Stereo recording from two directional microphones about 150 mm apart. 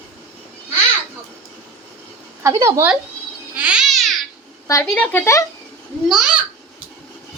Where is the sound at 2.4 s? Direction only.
20° right (ahead or behind).